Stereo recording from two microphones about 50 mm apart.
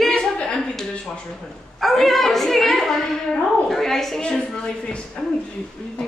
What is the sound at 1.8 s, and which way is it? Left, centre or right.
A woman's voice, centre.